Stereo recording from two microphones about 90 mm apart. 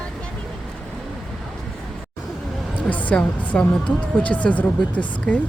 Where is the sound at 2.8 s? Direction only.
15° left (ahead or behind).